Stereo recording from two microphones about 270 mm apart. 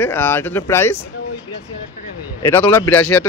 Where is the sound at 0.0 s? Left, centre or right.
Centre.